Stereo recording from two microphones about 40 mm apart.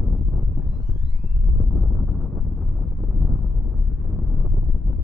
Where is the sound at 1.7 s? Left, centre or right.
Centre.